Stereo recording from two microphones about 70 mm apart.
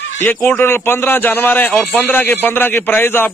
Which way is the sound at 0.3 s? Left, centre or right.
Left.